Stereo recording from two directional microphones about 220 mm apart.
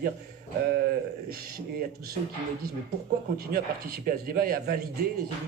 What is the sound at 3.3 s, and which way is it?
Speech, 45° right (ahead or behind).